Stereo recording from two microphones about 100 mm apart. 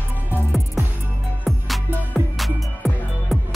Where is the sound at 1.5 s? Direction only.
Centre (ahead or behind).